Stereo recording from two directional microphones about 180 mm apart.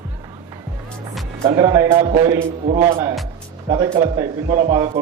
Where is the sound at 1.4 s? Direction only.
20° right (ahead or behind).